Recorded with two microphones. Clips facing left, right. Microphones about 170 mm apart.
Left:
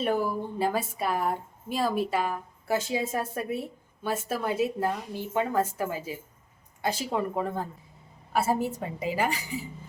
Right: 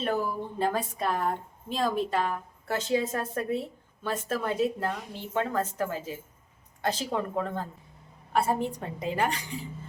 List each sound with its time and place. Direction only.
0.0 s a woman's voice: 10° left (ahead or behind)